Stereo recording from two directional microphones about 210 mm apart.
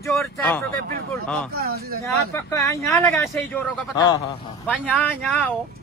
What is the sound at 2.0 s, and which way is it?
Speech, 15° left (ahead or behind).